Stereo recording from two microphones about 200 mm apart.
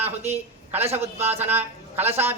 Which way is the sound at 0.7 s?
30° right (ahead or behind).